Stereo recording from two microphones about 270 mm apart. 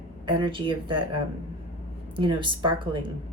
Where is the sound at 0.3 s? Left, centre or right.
Centre.